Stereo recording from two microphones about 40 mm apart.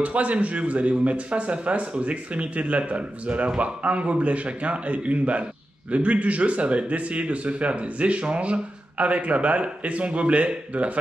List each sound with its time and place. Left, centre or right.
0.0 s speech: right